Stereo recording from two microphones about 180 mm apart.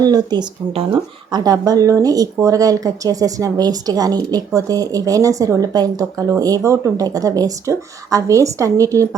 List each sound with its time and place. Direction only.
0.0 s speech: 20° right (ahead or behind)